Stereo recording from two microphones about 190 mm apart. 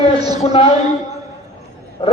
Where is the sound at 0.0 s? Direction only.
30° left (ahead or behind).